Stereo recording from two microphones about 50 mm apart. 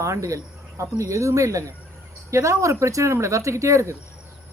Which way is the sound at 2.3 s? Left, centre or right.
Right.